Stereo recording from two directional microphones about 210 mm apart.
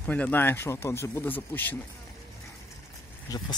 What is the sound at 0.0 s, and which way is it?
Speech, 5° left (ahead or behind).